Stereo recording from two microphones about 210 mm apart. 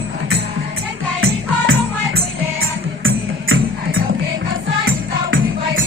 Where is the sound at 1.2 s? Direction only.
80° right.